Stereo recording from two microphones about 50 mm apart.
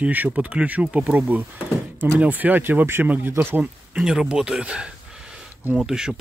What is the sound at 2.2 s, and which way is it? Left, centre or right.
Speech, right.